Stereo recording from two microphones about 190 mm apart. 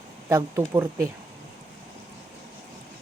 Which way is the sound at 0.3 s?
15° right (ahead or behind).